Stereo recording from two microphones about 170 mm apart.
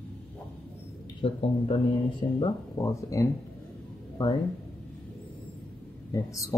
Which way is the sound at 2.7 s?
20° left (ahead or behind).